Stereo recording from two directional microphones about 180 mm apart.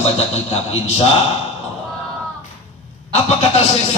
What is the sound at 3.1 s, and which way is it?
Speech, 35° left (ahead or behind).